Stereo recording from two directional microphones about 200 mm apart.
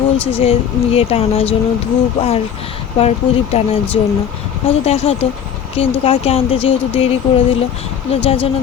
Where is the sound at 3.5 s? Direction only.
30° left (ahead or behind).